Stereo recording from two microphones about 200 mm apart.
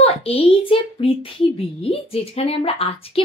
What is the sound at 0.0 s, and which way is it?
A child's voice, 30° left (ahead or behind).